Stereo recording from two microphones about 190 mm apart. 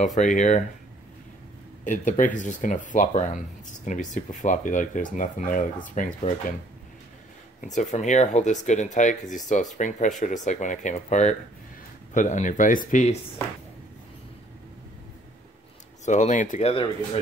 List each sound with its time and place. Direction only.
0.0 s speech: 40° left (ahead or behind)
1.9 s speech: 45° left (ahead or behind)
7.6 s speech: 40° left (ahead or behind)
16.1 s speech: 40° left (ahead or behind)